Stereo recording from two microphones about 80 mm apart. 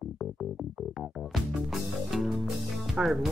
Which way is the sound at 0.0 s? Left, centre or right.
Centre.